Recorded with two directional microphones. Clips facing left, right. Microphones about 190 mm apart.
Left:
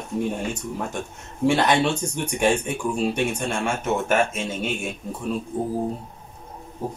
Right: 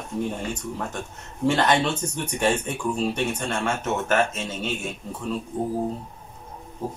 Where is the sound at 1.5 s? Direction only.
10° left (ahead or behind).